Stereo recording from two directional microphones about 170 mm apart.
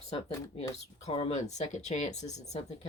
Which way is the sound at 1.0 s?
35° left (ahead or behind).